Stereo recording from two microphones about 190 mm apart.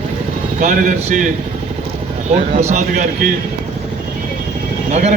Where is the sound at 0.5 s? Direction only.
40° right (ahead or behind).